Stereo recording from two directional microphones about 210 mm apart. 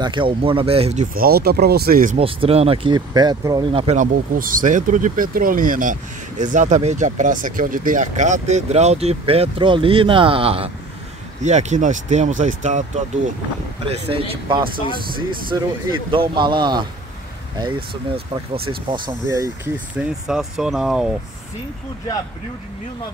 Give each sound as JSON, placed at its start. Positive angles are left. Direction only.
{"t": 0.0, "sound": "speech", "side_deg": -25}
{"t": 1.1, "sound": "speech", "side_deg": -45}
{"t": 2.1, "sound": "speech", "side_deg": -25}
{"t": 15.4, "sound": "speech", "side_deg": -25}